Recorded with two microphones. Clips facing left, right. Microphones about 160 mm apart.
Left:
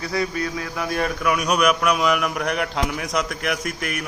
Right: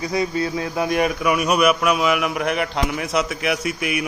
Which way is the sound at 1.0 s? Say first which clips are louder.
Right 1 dB; 10° right (ahead or behind).